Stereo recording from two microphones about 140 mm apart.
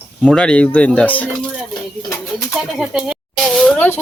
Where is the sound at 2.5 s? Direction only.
Centre (ahead or behind).